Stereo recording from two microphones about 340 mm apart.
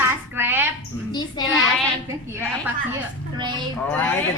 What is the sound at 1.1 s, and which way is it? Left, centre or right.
Speech, centre.